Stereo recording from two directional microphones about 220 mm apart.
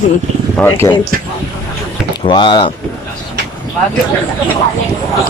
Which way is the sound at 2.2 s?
20° left (ahead or behind).